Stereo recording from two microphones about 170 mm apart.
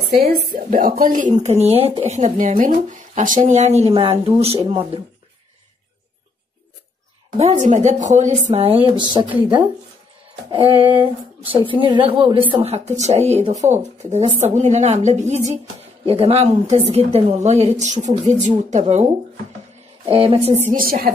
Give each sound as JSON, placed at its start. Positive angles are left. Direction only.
{"t": 0.5, "sound": "a woman's voice", "side_deg": -55}
{"t": 7.3, "sound": "a woman's voice", "side_deg": -45}
{"t": 11.4, "sound": "a woman's voice", "side_deg": -30}
{"t": 20.1, "sound": "a woman's voice", "side_deg": -30}